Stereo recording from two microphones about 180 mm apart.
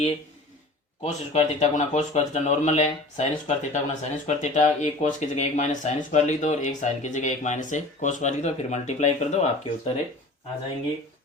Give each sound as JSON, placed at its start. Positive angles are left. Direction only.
{"t": 1.0, "sound": "speech", "side_deg": 40}